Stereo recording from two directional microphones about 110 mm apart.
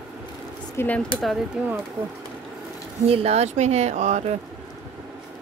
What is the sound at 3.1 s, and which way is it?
Speech, 70° right (ahead or behind).